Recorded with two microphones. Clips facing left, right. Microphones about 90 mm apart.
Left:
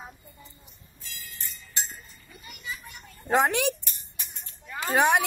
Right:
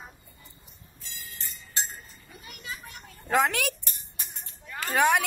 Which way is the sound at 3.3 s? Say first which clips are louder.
Left 2 dB; 20° left (ahead or behind).